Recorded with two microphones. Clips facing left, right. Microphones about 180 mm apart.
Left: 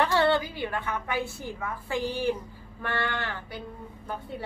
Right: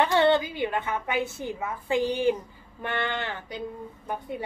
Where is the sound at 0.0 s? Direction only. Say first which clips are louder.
Right 2 dB; 20° right (ahead or behind).